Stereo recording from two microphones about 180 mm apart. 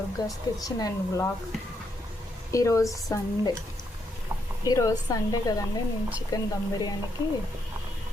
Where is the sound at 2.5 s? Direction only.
20° left (ahead or behind).